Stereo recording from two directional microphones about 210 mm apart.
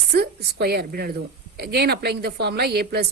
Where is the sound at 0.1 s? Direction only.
50° right (ahead or behind).